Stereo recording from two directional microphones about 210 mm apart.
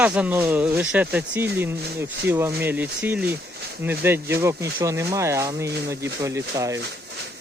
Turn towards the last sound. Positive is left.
turn(degrees=-15)  # may be behind; listen again after turning